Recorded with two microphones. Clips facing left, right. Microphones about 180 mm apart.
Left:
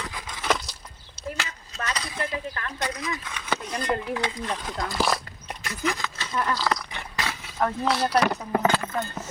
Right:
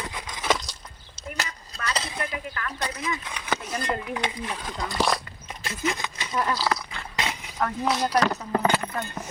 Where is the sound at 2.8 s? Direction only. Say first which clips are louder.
Left 3 dB; 30° right (ahead or behind).